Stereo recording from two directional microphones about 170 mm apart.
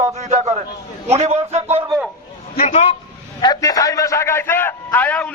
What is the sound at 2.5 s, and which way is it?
Speech, 45° left (ahead or behind).